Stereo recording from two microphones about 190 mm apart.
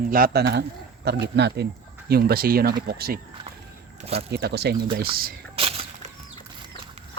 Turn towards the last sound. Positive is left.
turn(degrees=-30)  # may be behind; listen again after turning